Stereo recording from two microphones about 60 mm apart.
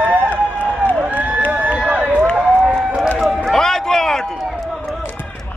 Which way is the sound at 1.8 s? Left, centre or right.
Right.